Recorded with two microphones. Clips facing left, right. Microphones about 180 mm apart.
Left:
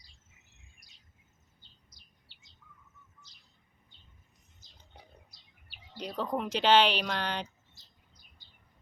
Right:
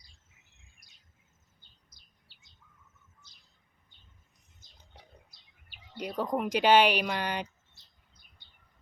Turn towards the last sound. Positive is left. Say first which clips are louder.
# right 2 dB
turn(degrees=-10)  # may be behind; listen again after turning